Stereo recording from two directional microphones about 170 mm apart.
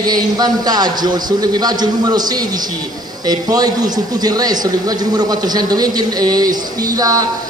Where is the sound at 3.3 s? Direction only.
20° right (ahead or behind).